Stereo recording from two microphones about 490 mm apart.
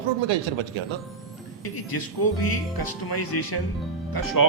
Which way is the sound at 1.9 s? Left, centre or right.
Left.